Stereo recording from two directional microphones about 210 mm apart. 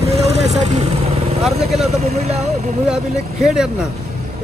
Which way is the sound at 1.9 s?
30° right (ahead or behind).